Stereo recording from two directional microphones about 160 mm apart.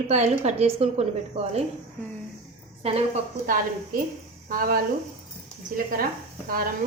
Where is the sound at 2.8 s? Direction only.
40° right (ahead or behind).